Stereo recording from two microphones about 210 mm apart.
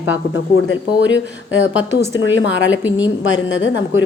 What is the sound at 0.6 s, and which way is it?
Speech, 65° left (ahead or behind).